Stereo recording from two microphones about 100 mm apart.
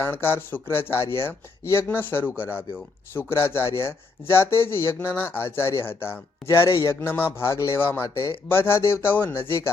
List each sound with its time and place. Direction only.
0.0 s speech: 25° left (ahead or behind)
6.7 s a man's voice: 35° left (ahead or behind)
7.0 s speech: 20° left (ahead or behind)